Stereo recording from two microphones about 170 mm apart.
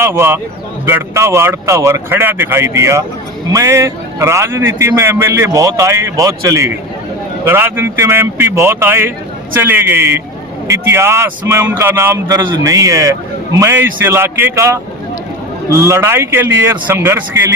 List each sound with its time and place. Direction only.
0.0 s a man's voice: 15° right (ahead or behind)